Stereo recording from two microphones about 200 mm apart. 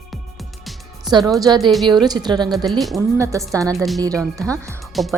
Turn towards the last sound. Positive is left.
turn(degrees=0)  # may be behind; listen again after turning